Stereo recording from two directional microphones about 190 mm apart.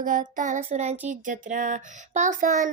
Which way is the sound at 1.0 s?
45° right (ahead or behind).